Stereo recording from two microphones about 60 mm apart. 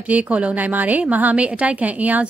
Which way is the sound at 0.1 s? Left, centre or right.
Right.